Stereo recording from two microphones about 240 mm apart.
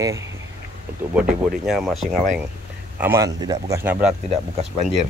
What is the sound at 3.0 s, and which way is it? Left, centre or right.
Speech, centre.